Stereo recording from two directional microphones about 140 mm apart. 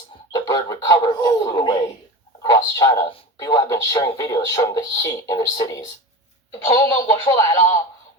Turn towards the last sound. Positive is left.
turn(degrees=25)  # may be behind; listen again after turning